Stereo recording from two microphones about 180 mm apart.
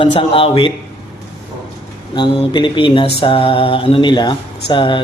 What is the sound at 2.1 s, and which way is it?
Speech, 25° left (ahead or behind).